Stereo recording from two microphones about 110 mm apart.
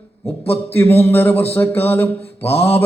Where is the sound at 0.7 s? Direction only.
20° left (ahead or behind).